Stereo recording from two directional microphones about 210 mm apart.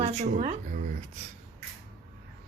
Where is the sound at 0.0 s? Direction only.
30° right (ahead or behind).